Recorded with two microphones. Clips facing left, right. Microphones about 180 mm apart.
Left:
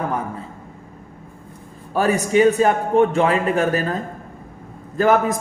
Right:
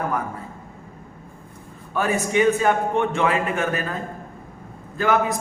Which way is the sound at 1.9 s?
35° left (ahead or behind).